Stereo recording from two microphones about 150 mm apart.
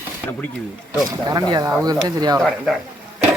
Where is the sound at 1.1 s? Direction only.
25° right (ahead or behind).